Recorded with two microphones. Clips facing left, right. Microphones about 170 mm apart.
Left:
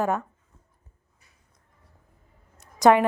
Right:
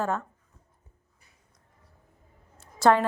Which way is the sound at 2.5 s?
15° left (ahead or behind).